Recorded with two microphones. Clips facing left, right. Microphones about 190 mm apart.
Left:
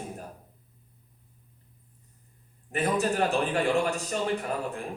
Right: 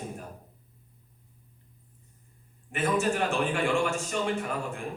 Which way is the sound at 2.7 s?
35° left (ahead or behind).